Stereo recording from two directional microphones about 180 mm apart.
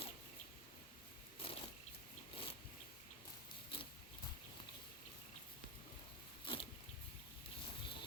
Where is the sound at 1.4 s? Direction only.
30° left (ahead or behind).